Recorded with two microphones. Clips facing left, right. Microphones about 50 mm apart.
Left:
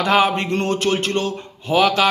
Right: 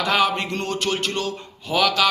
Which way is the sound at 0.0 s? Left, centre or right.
Left.